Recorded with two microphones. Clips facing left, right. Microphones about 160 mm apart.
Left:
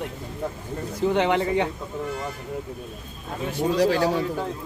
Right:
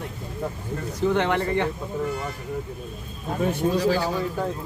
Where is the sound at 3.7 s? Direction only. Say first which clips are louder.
Left 6 dB; 70° left (ahead or behind).